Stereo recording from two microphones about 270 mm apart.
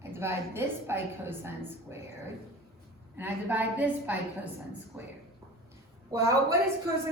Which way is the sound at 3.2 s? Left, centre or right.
Centre.